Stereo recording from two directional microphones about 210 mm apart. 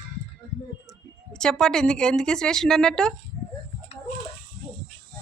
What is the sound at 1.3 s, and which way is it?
Speech, 5° left (ahead or behind).